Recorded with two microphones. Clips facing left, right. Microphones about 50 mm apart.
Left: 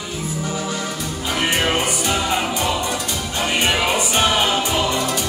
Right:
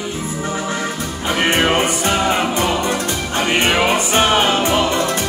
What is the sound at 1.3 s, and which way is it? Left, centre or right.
Music, right.